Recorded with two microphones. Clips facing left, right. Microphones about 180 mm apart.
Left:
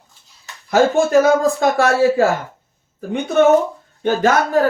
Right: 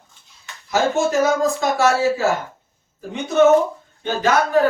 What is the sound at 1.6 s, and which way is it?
Speech, 55° left (ahead or behind).